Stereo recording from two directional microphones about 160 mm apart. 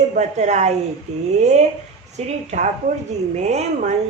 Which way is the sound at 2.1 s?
45° right (ahead or behind).